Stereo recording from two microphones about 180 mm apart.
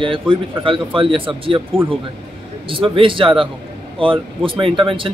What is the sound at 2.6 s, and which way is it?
A man's voice, 30° right (ahead or behind).